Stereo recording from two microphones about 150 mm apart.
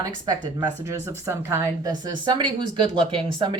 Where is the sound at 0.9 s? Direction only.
20° right (ahead or behind).